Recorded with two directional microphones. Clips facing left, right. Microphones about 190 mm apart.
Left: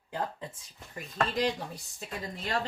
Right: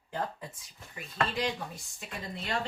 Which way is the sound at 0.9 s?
40° left (ahead or behind).